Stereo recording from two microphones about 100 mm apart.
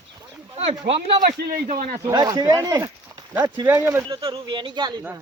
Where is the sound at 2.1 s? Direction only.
40° right (ahead or behind).